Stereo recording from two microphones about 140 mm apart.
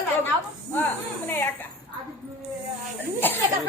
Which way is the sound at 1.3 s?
15° left (ahead or behind).